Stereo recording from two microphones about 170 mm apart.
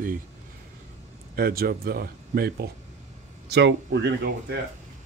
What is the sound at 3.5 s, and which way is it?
Speech, 90° right.